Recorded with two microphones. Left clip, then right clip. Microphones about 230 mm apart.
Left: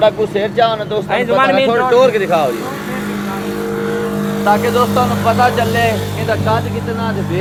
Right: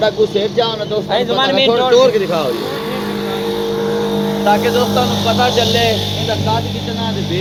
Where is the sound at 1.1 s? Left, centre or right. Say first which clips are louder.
Left 2 dB; left.